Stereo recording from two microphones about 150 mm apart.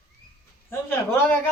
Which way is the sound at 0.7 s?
15° left (ahead or behind).